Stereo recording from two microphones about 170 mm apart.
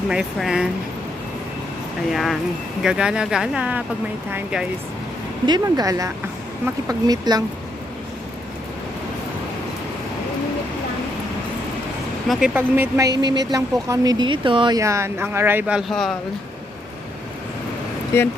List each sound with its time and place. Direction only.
0.1 s speech: centre (ahead or behind)
2.0 s a woman's voice: centre (ahead or behind)
5.5 s speech: 25° right (ahead or behind)
12.5 s a woman's voice: 15° right (ahead or behind)
18.1 s speech: 15° left (ahead or behind)